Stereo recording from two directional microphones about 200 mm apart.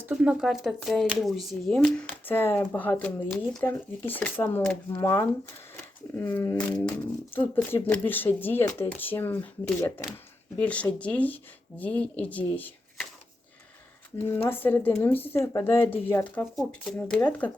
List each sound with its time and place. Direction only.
0.0 s speech: 5° right (ahead or behind)
14.3 s speech: 10° left (ahead or behind)